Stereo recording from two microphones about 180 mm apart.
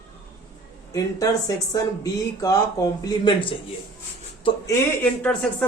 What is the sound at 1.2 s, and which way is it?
Speech, 20° left (ahead or behind).